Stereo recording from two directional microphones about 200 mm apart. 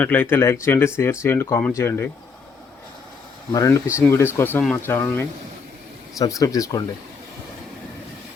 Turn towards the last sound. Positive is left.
turn(degrees=15)  # may be behind; listen again after turning